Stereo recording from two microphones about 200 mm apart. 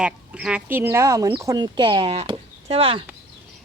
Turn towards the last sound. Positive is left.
turn(degrees=-30)  # may be behind; listen again after turning